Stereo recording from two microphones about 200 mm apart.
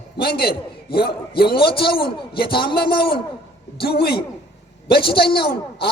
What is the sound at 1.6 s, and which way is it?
A man's voice, 25° left (ahead or behind).